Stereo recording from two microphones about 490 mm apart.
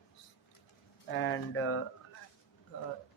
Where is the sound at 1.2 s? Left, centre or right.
Left.